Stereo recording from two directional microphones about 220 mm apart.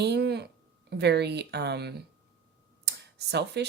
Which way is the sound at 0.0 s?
50° right (ahead or behind).